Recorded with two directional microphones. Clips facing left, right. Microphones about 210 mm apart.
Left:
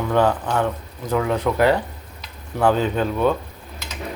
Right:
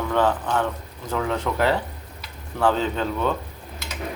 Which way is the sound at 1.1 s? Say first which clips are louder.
Left 4 dB; 10° left (ahead or behind).